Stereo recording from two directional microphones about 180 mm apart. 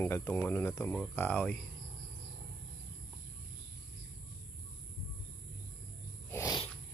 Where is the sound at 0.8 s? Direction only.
Centre (ahead or behind).